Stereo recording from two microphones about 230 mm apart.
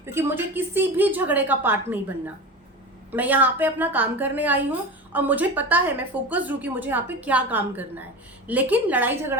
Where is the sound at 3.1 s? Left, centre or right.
Centre.